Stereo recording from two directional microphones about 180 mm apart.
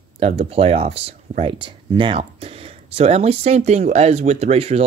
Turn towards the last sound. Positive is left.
turn(degrees=-35)  # may be behind; listen again after turning